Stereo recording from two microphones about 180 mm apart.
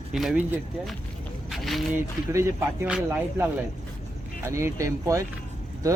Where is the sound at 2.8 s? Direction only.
10° right (ahead or behind).